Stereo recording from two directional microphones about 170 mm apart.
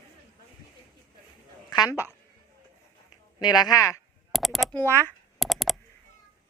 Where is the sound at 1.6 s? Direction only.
25° left (ahead or behind).